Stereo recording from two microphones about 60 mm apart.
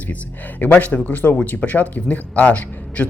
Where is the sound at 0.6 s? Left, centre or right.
Left.